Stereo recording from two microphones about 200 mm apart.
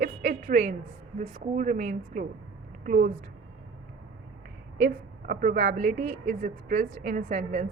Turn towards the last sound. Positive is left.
turn(degrees=-35)  # may be behind; listen again after turning